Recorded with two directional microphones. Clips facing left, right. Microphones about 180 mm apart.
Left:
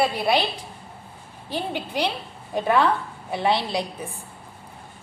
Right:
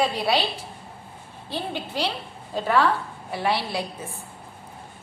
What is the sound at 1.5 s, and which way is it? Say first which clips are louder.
A woman's voice: left 2 dB; 15° left (ahead or behind).